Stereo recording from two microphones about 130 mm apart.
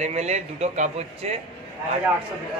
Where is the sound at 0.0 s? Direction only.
60° right (ahead or behind).